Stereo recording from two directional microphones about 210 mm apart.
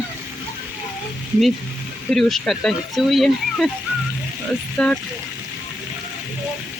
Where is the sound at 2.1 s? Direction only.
Centre (ahead or behind).